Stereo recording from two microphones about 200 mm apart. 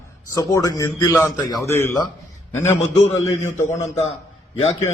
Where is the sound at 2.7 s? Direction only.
35° left (ahead or behind).